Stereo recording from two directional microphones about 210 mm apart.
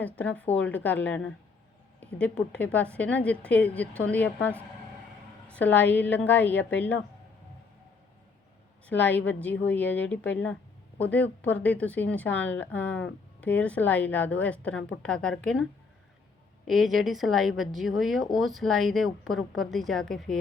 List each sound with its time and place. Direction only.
0.0 s a woman's voice: 5° left (ahead or behind)
8.9 s a woman's voice: 10° left (ahead or behind)
16.6 s a woman's voice: centre (ahead or behind)